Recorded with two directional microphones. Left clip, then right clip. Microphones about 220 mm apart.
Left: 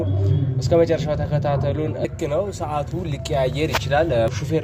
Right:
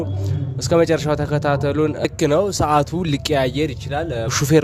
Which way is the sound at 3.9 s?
20° right (ahead or behind).